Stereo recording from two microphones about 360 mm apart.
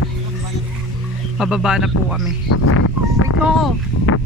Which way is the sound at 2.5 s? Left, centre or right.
Left.